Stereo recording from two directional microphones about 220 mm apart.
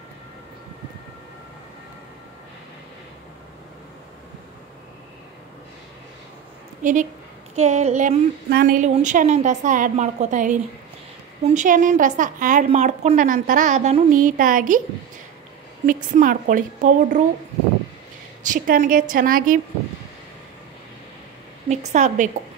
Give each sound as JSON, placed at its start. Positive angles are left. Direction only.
{"t": 6.8, "sound": "a woman's voice", "side_deg": -35}
{"t": 8.5, "sound": "a woman's voice", "side_deg": -45}
{"t": 15.9, "sound": "a woman's voice", "side_deg": -35}
{"t": 18.4, "sound": "a woman's voice", "side_deg": -35}
{"t": 21.6, "sound": "a woman's voice", "side_deg": -30}